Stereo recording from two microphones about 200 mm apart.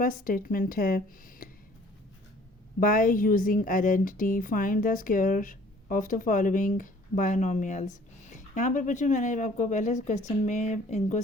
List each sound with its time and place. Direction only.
0.0 s speech: 45° left (ahead or behind)
2.8 s a woman's voice: 45° left (ahead or behind)